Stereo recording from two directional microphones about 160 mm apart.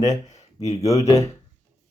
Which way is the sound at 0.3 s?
45° left (ahead or behind).